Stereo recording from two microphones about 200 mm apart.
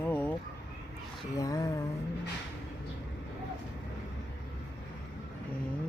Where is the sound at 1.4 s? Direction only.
15° left (ahead or behind).